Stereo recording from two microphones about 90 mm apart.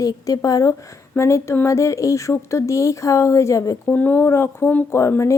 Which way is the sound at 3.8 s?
20° left (ahead or behind).